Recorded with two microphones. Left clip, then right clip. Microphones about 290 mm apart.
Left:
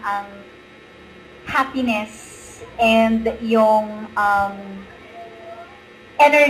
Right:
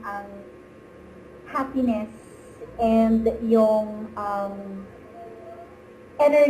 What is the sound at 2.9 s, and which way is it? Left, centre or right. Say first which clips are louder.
A woman's voice: left 4 dB; centre.